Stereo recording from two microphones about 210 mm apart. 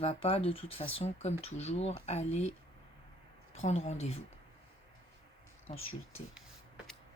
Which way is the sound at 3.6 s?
30° left (ahead or behind).